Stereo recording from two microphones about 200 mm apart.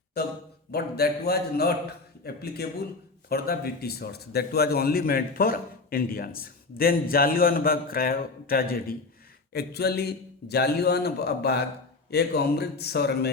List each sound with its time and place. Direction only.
0.1 s a man's voice: 50° left (ahead or behind)